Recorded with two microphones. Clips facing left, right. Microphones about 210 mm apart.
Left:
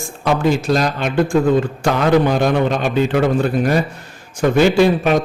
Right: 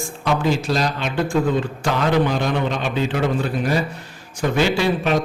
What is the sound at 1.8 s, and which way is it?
A man's voice, 50° left (ahead or behind).